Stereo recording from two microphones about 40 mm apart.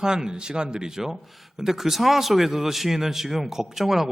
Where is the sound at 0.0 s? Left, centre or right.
Centre.